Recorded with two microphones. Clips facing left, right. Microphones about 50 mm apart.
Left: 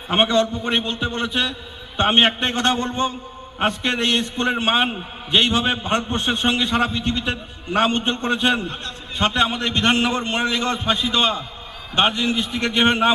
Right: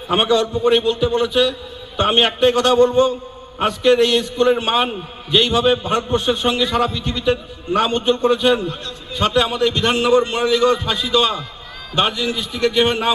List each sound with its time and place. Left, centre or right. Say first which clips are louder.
0.2 s a man's voice: right 1 dB; left